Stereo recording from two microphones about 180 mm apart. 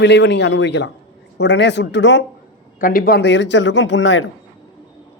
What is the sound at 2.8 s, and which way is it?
Speech, 50° left (ahead or behind).